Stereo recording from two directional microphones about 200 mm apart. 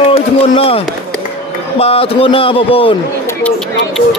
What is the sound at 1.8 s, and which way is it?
A man's voice, 30° left (ahead or behind).